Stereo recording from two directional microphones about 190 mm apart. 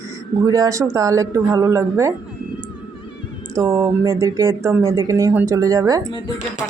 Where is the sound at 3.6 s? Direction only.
20° right (ahead or behind).